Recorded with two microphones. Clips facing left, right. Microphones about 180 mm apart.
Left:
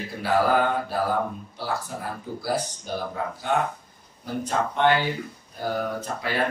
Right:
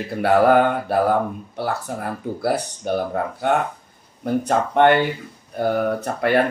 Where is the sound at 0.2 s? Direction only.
60° right (ahead or behind).